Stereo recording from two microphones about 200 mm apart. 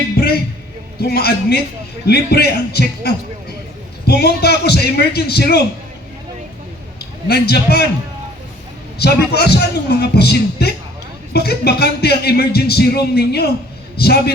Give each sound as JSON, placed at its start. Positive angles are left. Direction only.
{"t": 0.2, "sound": "a sound", "side_deg": 50}
{"t": 0.9, "sound": "a man's voice", "side_deg": 50}
{"t": 7.3, "sound": "a man's voice", "side_deg": 55}
{"t": 9.0, "sound": "a man's voice", "side_deg": 55}